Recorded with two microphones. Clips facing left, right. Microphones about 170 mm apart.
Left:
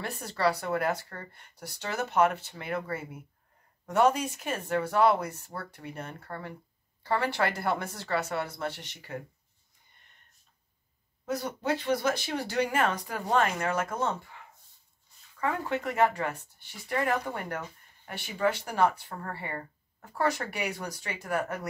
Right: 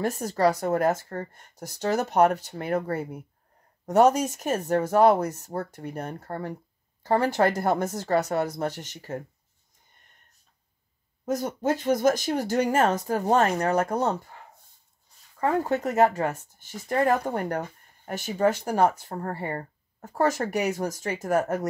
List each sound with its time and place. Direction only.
0.0 s speech: 40° right (ahead or behind)
11.2 s speech: 45° right (ahead or behind)
15.4 s speech: 40° right (ahead or behind)